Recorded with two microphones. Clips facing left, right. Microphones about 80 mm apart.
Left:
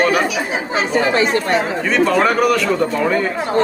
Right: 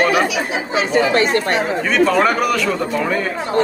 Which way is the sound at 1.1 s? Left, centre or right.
Right.